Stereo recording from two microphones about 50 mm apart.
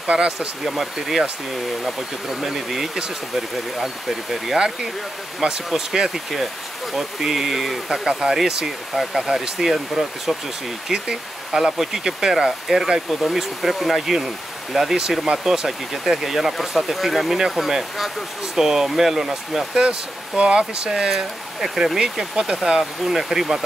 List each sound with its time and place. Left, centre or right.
0.0 s speech: centre
0.7 s speech: centre
2.4 s speech: centre
5.7 s speech: centre
19.8 s speech: right